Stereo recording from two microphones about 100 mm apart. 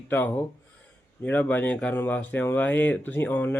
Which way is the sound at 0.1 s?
20° left (ahead or behind).